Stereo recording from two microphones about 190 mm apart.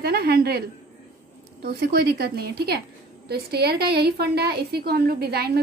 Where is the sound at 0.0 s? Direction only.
55° right (ahead or behind).